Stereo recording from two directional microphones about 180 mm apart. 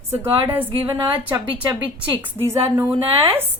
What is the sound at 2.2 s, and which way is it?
Speech, 15° right (ahead or behind).